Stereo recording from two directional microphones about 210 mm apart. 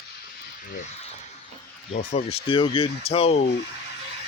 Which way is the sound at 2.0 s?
35° left (ahead or behind).